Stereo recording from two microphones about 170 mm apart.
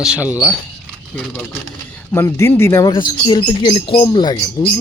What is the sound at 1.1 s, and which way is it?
Speech, 5° left (ahead or behind).